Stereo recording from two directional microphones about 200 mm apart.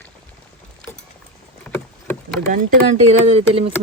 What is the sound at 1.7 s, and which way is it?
Rowboat, 10° left (ahead or behind).